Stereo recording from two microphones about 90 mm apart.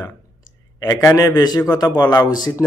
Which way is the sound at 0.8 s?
40° left (ahead or behind).